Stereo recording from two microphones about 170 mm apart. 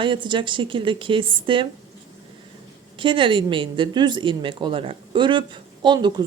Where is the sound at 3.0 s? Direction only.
30° right (ahead or behind).